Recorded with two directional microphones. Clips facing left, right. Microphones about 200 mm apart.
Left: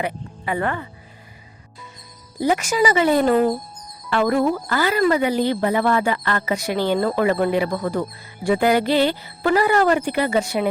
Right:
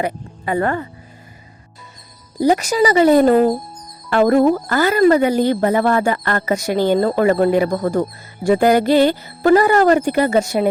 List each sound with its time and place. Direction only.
0.0 s speech: 40° right (ahead or behind)
2.4 s speech: 35° right (ahead or behind)